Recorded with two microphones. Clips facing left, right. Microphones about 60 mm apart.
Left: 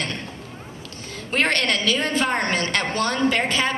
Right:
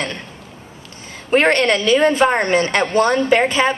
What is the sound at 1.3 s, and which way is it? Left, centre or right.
A woman's voice, right.